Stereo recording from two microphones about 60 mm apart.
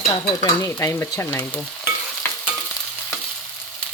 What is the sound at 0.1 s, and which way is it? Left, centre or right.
Stir, left.